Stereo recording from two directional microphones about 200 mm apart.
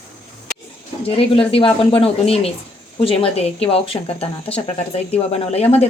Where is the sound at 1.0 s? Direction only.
30° left (ahead or behind).